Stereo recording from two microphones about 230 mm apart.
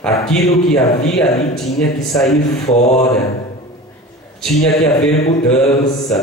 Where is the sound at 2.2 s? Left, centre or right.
Left.